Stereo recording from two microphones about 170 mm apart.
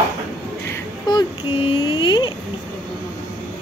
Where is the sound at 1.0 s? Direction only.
30° left (ahead or behind).